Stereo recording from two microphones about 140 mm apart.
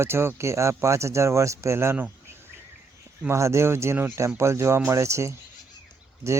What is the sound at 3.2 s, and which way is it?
Speech, 20° right (ahead or behind).